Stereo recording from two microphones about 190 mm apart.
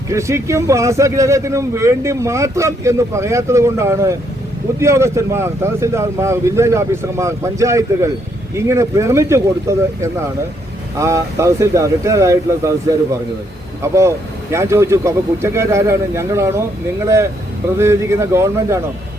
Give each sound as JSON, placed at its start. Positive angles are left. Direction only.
{"t": 0.1, "sound": "speech", "side_deg": -15}
{"t": 17.7, "sound": "speech", "side_deg": -15}